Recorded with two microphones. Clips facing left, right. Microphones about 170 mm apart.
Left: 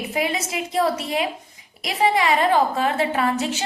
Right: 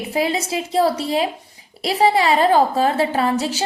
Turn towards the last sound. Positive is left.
turn(degrees=-35)  # may be behind; listen again after turning